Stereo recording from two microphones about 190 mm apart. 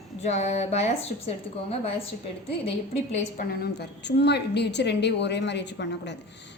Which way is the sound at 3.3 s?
60° left (ahead or behind).